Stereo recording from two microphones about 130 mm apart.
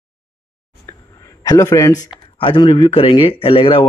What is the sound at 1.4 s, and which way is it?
Speech, 25° left (ahead or behind).